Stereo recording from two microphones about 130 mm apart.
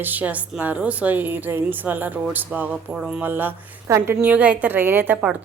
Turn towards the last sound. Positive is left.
turn(degrees=-15)  # may be behind; listen again after turning